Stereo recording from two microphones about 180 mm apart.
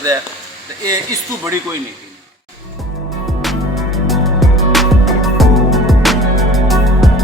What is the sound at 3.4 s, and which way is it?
Music, centre (ahead or behind).